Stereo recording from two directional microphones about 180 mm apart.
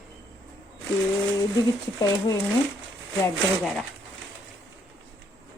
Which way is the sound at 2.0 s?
20° left (ahead or behind).